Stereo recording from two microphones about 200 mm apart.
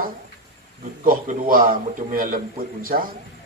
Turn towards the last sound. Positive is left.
turn(degrees=-45)  # may be behind; listen again after turning